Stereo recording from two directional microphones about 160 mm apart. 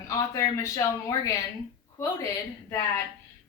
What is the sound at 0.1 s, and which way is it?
Speech, 20° left (ahead or behind).